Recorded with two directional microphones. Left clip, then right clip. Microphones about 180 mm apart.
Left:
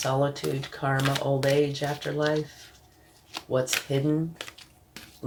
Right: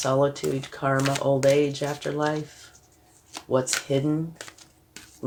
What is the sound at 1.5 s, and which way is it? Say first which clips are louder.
Speech: right 2 dB; 55° right (ahead or behind).